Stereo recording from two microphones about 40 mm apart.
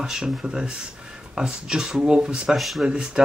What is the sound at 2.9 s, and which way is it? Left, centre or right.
Speech, right.